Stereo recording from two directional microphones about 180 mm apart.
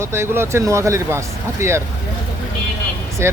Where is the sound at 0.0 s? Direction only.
15° right (ahead or behind).